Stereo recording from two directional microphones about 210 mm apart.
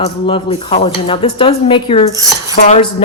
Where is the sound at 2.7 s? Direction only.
25° left (ahead or behind).